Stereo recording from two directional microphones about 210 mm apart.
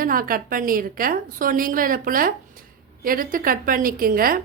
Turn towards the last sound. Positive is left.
turn(degrees=-45)  # may be behind; listen again after turning